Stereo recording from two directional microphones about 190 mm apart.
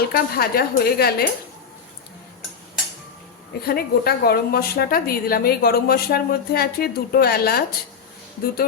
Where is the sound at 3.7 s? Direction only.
55° left (ahead or behind).